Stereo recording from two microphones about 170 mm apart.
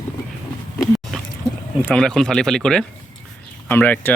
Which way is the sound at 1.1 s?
Centre (ahead or behind).